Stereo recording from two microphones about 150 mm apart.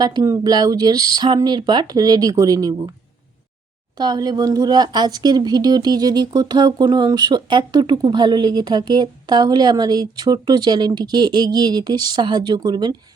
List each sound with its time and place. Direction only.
0.0 s speech: 25° right (ahead or behind)
3.9 s speech: 25° right (ahead or behind)